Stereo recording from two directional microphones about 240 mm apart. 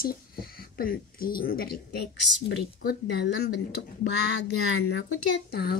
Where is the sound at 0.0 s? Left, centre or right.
Left.